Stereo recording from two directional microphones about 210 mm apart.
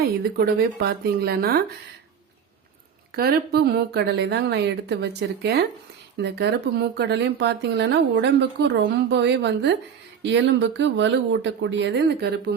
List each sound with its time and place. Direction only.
0.0 s speech: 45° right (ahead or behind)
3.2 s speech: 50° right (ahead or behind)